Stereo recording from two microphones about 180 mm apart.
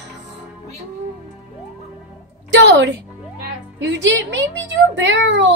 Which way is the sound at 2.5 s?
90° right.